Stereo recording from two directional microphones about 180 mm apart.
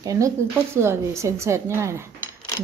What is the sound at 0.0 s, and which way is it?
Speech, 20° right (ahead or behind).